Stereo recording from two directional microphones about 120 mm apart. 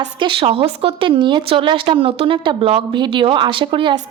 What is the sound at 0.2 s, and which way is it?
A woman's voice, 45° right (ahead or behind).